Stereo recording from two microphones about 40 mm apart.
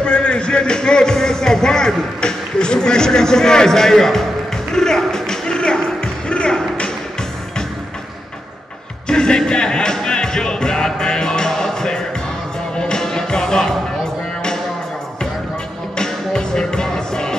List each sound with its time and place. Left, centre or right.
0.0 s music: left
9.0 s music: centre
16.0 s music: centre